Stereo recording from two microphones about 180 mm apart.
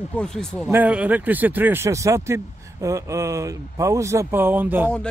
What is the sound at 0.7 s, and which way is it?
Speech, 10° right (ahead or behind).